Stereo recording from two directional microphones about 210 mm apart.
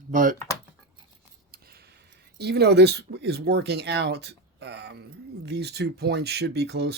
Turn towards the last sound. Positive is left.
turn(degrees=-50)  # may be behind; listen again after turning